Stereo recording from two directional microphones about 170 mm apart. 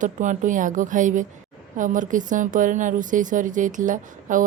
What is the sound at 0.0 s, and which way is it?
A woman's voice, 50° right (ahead or behind).